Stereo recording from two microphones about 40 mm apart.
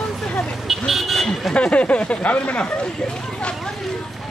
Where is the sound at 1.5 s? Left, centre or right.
Left.